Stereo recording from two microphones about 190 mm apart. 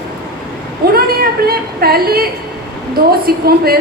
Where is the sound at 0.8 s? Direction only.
55° right (ahead or behind).